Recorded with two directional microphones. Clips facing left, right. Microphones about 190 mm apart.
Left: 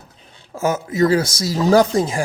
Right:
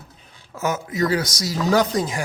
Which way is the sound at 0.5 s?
30° left (ahead or behind).